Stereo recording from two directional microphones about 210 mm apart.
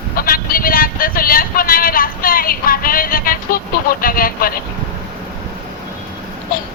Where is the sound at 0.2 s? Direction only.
45° left (ahead or behind).